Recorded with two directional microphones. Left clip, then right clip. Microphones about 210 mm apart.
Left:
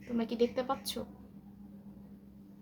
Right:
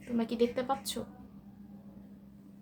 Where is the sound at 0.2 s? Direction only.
5° right (ahead or behind).